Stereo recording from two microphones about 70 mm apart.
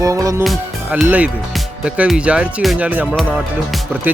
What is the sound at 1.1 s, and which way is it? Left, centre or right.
Music, right.